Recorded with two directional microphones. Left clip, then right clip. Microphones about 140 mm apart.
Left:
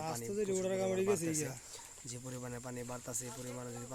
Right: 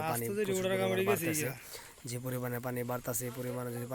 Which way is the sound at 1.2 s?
35° right (ahead or behind).